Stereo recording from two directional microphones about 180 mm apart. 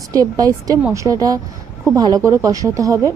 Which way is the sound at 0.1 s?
20° right (ahead or behind).